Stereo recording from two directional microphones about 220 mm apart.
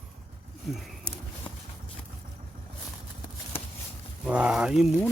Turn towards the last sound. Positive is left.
turn(degrees=0)  # may be behind; listen again after turning